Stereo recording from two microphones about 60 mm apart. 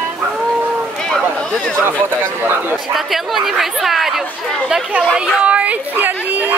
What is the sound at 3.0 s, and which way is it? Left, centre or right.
Speech, centre.